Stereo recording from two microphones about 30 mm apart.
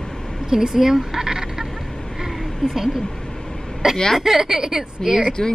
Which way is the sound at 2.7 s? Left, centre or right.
Centre.